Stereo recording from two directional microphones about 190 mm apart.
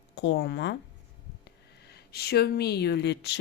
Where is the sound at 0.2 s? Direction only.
65° left (ahead or behind).